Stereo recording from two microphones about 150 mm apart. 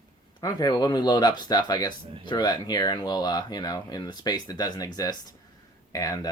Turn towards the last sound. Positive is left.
turn(degrees=25)  # may be behind; listen again after turning